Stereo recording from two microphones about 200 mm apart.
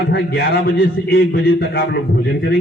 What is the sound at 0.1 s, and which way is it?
A man's voice, 55° left (ahead or behind).